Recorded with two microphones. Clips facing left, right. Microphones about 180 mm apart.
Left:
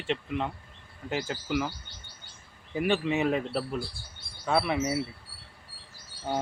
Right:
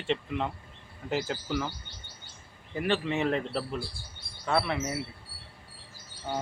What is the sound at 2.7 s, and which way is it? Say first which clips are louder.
Speech: left 2 dB; 10° left (ahead or behind).